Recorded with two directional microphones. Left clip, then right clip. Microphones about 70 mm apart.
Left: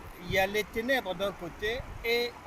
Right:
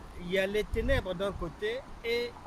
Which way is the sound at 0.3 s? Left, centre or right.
Right.